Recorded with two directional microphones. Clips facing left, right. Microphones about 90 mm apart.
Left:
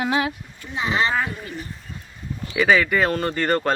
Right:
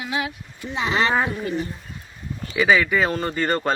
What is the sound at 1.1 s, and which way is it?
Speech, 20° right (ahead or behind).